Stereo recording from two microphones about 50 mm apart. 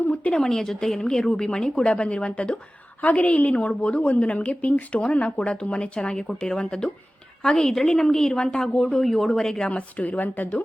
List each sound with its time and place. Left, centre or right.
0.1 s a woman's voice: centre
9.7 s a woman's voice: left